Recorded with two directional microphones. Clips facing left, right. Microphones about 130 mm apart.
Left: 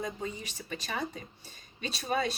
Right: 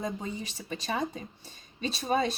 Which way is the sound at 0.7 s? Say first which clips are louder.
Right 4 dB; 30° right (ahead or behind).